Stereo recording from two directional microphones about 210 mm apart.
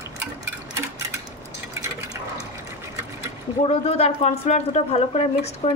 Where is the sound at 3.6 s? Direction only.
25° left (ahead or behind).